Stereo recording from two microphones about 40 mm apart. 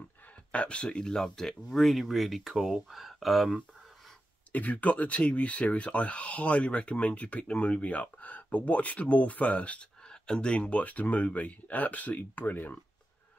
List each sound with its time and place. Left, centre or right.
0.5 s speech: left; by 2.5 s centre
2.5 s speech: centre
2.9 s speech: centre
4.5 s speech: left
10.0 s speech: centre; by 12.7 s left